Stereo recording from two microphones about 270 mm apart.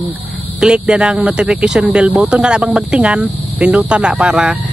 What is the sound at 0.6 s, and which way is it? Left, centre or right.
Speech, centre.